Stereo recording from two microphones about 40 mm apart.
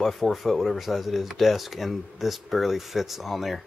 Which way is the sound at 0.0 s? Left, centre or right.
Centre.